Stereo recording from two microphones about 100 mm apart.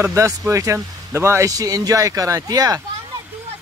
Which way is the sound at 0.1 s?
30° right (ahead or behind).